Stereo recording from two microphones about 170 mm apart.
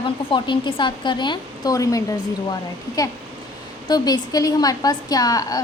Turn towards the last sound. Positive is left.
turn(degrees=20)  # may be behind; listen again after turning